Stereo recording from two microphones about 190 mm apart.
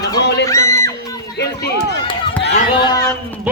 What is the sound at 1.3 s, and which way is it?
Run, 60° left (ahead or behind).